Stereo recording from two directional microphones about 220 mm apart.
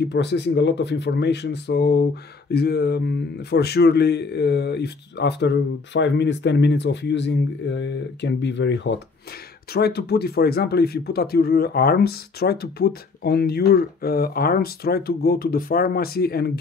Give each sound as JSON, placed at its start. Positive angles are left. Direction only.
{"t": 0.0, "sound": "speech", "side_deg": 50}